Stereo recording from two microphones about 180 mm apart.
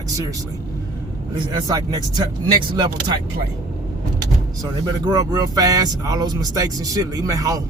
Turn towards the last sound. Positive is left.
turn(degrees=-20)  # may be behind; listen again after turning